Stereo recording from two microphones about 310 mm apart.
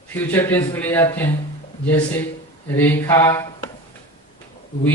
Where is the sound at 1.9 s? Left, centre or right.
Centre.